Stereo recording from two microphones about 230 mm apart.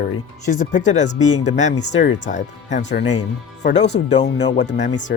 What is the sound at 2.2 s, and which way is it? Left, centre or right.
Speech, left.